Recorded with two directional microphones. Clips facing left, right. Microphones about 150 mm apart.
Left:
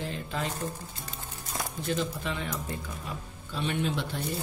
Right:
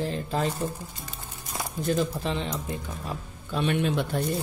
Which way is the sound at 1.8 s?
45° right (ahead or behind).